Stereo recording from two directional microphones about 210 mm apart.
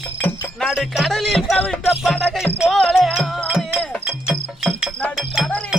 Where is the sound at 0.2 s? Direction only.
5° left (ahead or behind).